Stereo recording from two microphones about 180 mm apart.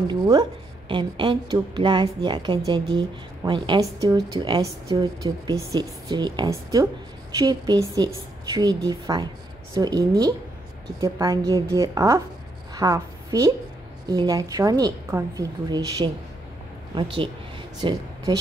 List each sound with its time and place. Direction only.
0.1 s a woman's voice: 20° right (ahead or behind)